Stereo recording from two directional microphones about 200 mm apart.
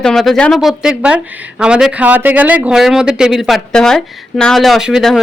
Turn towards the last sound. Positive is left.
turn(degrees=0)  # may be behind; listen again after turning